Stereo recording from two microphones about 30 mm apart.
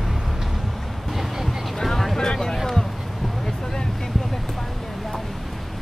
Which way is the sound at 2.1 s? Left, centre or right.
Left.